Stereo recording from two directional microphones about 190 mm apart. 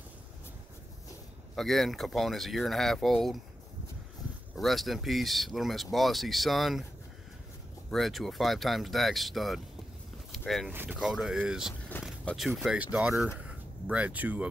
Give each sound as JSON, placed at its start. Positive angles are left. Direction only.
{"t": 1.5, "sound": "speech", "side_deg": 0}
{"t": 4.6, "sound": "speech", "side_deg": 0}
{"t": 7.9, "sound": "speech", "side_deg": 0}
{"t": 10.3, "sound": "a sound", "side_deg": 0}
{"t": 10.7, "sound": "speech", "side_deg": -10}